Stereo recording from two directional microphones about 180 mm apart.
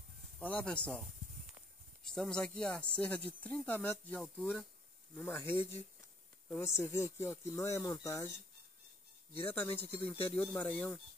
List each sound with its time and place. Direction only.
0.4 s speech: 10° left (ahead or behind)
2.1 s speech: 5° left (ahead or behind)
6.8 s speech: 15° left (ahead or behind)
9.5 s speech: 10° left (ahead or behind)
9.9 s speech: 30° left (ahead or behind)
10.3 s speech: 10° left (ahead or behind)